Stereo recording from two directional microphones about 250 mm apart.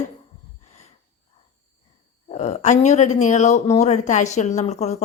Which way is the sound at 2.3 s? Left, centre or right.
Left.